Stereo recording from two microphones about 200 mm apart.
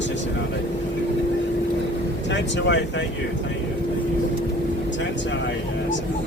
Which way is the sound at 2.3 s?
60° left (ahead or behind).